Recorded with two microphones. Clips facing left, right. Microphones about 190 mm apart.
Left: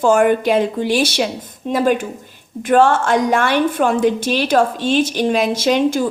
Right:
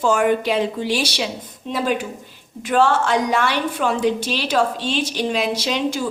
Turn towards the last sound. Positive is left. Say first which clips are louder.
# left 7 dB
turn(degrees=50)  # may be behind; listen again after turning